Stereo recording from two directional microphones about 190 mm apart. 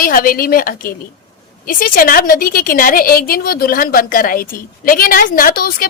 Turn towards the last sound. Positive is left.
turn(degrees=50)  # may be behind; listen again after turning